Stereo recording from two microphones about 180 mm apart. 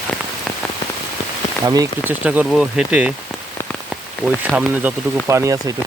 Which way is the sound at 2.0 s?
10° right (ahead or behind).